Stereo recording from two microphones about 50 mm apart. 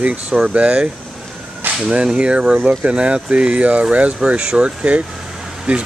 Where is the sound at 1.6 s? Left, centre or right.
Right.